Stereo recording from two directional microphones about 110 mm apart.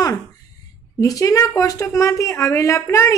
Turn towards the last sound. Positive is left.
turn(degrees=25)  # may be behind; listen again after turning